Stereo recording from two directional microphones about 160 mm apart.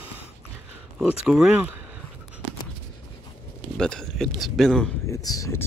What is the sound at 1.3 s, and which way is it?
Speech, 5° right (ahead or behind).